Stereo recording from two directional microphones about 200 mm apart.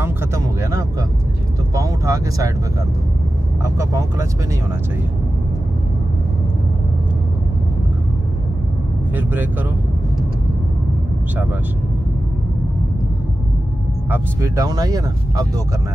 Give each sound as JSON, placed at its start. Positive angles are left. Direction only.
{"t": 0.0, "sound": "speech", "side_deg": -15}
{"t": 1.8, "sound": "vehicle", "side_deg": -15}
{"t": 3.6, "sound": "speech", "side_deg": -15}
{"t": 9.1, "sound": "speech", "side_deg": -10}
{"t": 14.1, "sound": "speech", "side_deg": -15}